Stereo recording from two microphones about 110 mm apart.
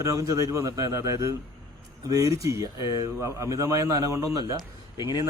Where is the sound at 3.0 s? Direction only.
25° right (ahead or behind).